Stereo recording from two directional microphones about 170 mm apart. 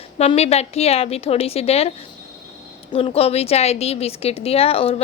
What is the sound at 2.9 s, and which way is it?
A woman's voice, 35° left (ahead or behind).